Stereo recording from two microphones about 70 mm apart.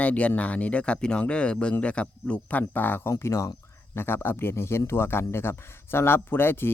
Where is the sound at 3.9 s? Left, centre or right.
Left.